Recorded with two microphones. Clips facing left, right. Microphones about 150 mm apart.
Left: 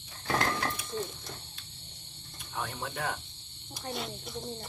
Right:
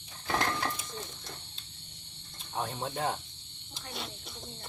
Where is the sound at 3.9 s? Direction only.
Centre (ahead or behind).